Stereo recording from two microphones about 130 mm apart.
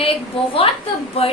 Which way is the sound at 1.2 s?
50° left (ahead or behind).